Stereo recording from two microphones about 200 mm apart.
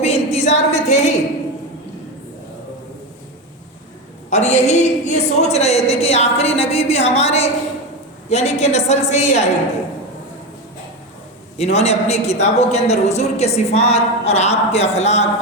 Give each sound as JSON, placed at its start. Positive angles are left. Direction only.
{"t": 0.0, "sound": "a sound", "side_deg": 30}
{"t": 4.3, "sound": "a man's voice", "side_deg": 35}
{"t": 11.5, "sound": "a man's voice", "side_deg": 30}